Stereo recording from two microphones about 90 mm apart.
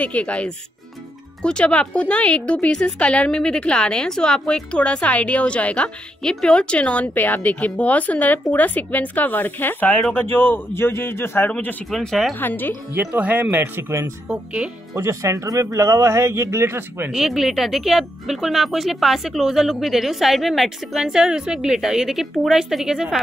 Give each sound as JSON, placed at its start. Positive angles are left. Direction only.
{"t": 0.0, "sound": "speech", "side_deg": 15}
{"t": 11.9, "sound": "speech", "side_deg": 5}
{"t": 12.4, "sound": "speech", "side_deg": 20}
{"t": 13.1, "sound": "speech", "side_deg": -20}
{"t": 14.3, "sound": "speech", "side_deg": -15}
{"t": 15.0, "sound": "speech", "side_deg": -30}
{"t": 17.1, "sound": "speech", "side_deg": -5}